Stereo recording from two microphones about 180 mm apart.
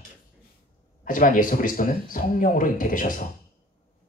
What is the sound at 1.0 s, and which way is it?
Speech, 50° left (ahead or behind).